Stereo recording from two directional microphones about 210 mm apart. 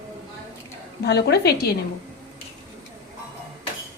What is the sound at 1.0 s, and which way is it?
Speech, 50° left (ahead or behind).